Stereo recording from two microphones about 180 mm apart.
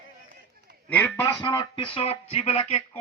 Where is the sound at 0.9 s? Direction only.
10° left (ahead or behind); by 3.0 s 30° left (ahead or behind).